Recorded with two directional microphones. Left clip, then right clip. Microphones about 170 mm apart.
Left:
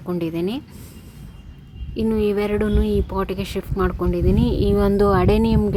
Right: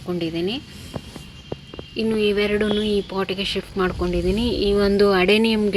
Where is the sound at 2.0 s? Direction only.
15° left (ahead or behind).